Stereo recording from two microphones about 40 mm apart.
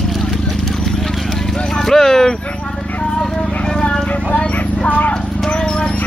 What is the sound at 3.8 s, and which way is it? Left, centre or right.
Horse, left.